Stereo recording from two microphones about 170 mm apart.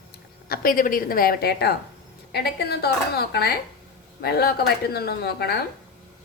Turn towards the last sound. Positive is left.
turn(degrees=70)  # may be behind; listen again after turning